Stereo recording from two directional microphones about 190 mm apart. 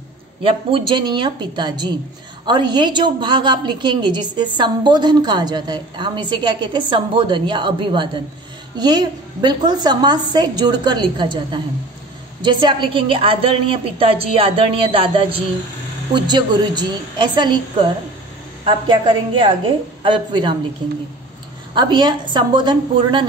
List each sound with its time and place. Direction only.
0.4 s a woman's voice: 30° right (ahead or behind)
18.6 s a woman's voice: 25° right (ahead or behind)
21.7 s a woman's voice: 25° right (ahead or behind)